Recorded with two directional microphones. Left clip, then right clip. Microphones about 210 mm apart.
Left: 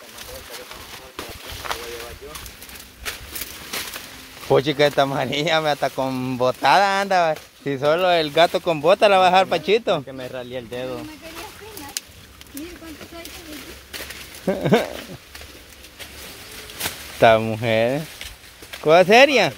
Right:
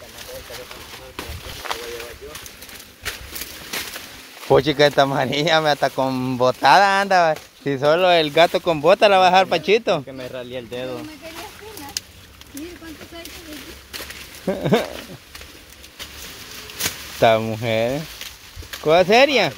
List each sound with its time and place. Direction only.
4.5 s speech: 10° right (ahead or behind)
10.1 s speech: 20° left (ahead or behind)
14.4 s speech: 10° left (ahead or behind)
17.2 s speech: 10° left (ahead or behind)